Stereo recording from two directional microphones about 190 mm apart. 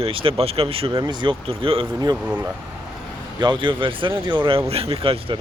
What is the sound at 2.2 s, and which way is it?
Speech, 10° right (ahead or behind).